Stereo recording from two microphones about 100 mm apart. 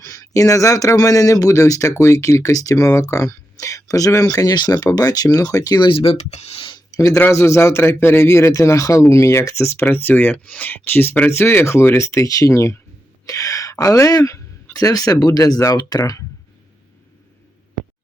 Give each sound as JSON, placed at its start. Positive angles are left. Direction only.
{"t": 0.0, "sound": "speech", "side_deg": 30}
{"t": 5.9, "sound": "speech", "side_deg": 85}
{"t": 6.9, "sound": "speech", "side_deg": 35}